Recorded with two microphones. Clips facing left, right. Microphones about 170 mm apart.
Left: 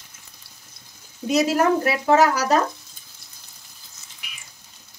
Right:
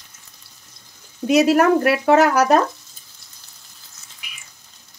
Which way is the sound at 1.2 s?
65° right (ahead or behind).